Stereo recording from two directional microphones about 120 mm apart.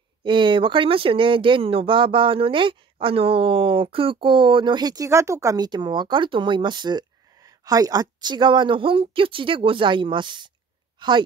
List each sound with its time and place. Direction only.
0.2 s speech: 40° right (ahead or behind)